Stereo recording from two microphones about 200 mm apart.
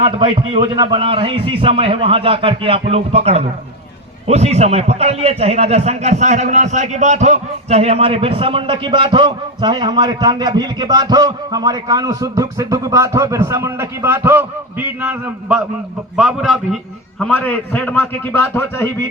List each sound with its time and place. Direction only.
0.0 s a man's voice: 30° right (ahead or behind); by 19.0 s 10° left (ahead or behind)